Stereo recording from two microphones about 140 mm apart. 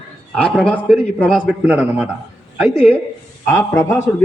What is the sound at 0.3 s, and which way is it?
Speech, 5° left (ahead or behind).